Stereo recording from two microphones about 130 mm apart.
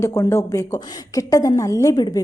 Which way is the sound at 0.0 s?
20° left (ahead or behind).